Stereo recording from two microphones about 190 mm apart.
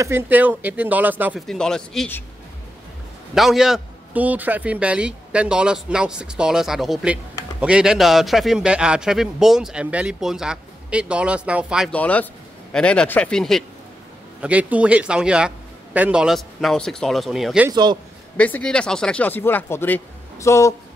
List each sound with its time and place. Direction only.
0.0 s speech: 10° right (ahead or behind)
1.5 s a man's voice: 5° left (ahead or behind)
3.3 s a man's voice: centre (ahead or behind)
11.9 s a man's voice: 10° left (ahead or behind)
17.6 s a man's voice: 20° right (ahead or behind)
18.4 s speech: 5° left (ahead or behind)